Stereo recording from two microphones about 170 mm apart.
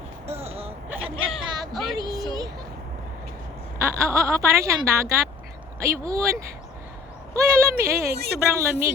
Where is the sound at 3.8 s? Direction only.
15° right (ahead or behind).